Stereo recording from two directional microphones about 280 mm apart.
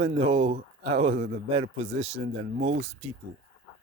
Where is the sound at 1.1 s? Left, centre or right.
Right.